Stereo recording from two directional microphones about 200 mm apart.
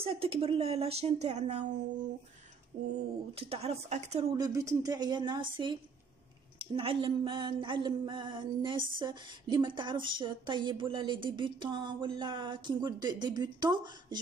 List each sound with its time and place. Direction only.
0.0 s speech: 30° right (ahead or behind)
3.3 s speech: 30° right (ahead or behind)
4.4 s speech: 15° right (ahead or behind)